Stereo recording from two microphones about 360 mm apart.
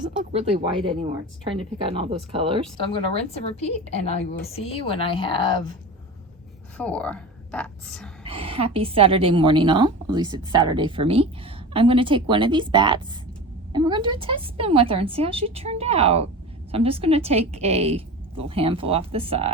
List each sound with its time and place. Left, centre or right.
0.3 s a woman's voice: centre
2.8 s a woman's voice: centre
6.7 s a woman's voice: centre
8.2 s a woman's voice: centre